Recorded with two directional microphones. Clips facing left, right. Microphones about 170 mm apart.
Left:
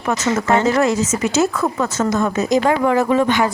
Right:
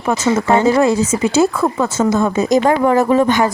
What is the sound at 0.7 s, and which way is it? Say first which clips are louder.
Speech: right 3 dB; 30° right (ahead or behind).